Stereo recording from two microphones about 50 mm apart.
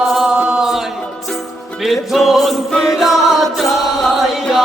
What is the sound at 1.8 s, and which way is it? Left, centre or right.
Music, centre.